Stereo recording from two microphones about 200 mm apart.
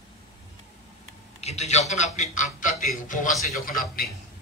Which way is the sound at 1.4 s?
30° left (ahead or behind).